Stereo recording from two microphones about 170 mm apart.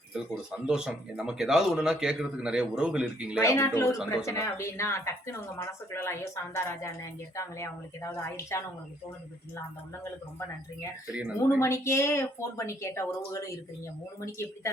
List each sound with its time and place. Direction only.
0.7 s speech: centre (ahead or behind)
3.4 s speech: 15° left (ahead or behind)
11.1 s speech: 5° right (ahead or behind)
11.6 s speech: 15° left (ahead or behind)